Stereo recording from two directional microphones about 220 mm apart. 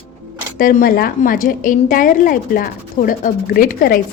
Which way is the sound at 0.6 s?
40° left (ahead or behind).